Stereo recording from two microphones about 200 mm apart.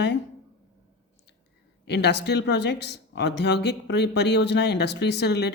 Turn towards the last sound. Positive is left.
turn(degrees=55)  # may be behind; listen again after turning